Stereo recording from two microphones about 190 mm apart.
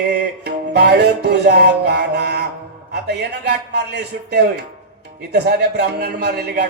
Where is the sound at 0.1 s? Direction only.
60° right (ahead or behind).